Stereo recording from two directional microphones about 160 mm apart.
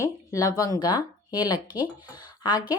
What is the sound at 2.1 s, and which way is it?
Speech, 25° left (ahead or behind).